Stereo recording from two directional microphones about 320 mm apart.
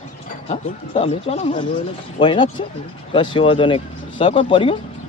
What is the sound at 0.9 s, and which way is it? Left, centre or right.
Speech, centre.